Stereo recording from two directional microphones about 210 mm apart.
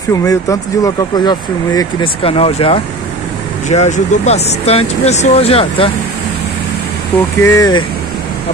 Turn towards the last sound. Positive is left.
turn(degrees=20)  # may be behind; listen again after turning